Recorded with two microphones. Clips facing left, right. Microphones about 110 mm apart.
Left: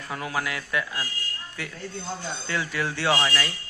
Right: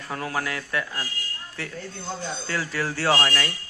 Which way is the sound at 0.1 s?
40° right (ahead or behind).